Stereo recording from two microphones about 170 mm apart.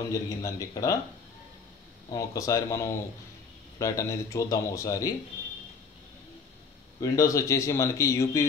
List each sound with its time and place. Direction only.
0.1 s speech: 20° left (ahead or behind)
2.0 s speech: 20° left (ahead or behind)
7.0 s a man's voice: 20° left (ahead or behind)